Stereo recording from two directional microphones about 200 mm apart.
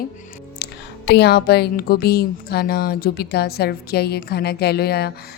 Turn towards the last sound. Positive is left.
turn(degrees=55)  # may be behind; listen again after turning